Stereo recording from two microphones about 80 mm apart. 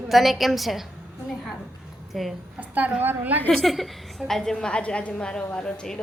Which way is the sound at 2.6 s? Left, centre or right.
Centre.